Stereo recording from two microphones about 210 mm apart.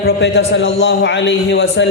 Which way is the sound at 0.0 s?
55° left (ahead or behind).